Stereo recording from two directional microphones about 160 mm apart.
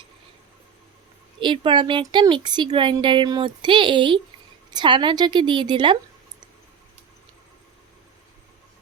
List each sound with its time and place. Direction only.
1.4 s a woman's voice: 30° right (ahead or behind)